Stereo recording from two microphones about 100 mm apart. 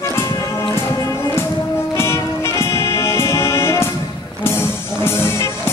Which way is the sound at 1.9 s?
25° left (ahead or behind).